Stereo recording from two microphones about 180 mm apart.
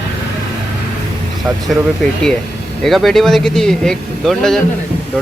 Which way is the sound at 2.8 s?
Centre (ahead or behind).